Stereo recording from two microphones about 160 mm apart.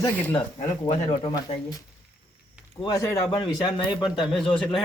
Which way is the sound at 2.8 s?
20° left (ahead or behind).